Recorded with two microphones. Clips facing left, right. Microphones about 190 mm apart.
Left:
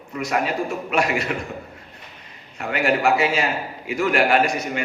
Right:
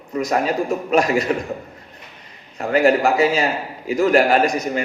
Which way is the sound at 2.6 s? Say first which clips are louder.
Right 5 dB; 40° right (ahead or behind).